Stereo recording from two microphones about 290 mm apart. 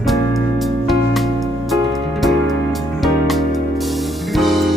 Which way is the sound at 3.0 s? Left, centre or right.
Centre.